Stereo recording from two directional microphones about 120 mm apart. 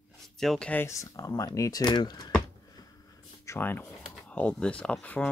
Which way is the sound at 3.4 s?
20° left (ahead or behind).